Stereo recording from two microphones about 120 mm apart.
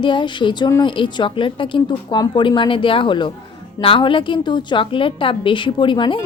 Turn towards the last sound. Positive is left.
turn(degrees=40)  # may be behind; listen again after turning